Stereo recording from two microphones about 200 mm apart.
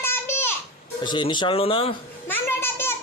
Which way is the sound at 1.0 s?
25° left (ahead or behind).